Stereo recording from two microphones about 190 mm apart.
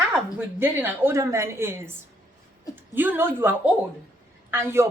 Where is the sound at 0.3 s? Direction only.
10° right (ahead or behind).